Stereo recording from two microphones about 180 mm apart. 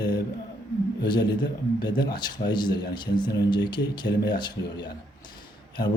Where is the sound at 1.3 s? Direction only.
70° left (ahead or behind).